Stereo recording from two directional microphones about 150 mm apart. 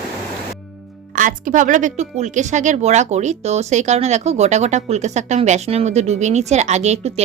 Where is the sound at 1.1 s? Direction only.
60° right (ahead or behind).